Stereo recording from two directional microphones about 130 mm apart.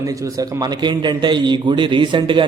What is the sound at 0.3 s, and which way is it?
A man's voice, 30° right (ahead or behind).